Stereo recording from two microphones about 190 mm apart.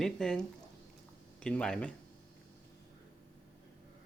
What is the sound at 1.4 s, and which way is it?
Speech, 5° left (ahead or behind).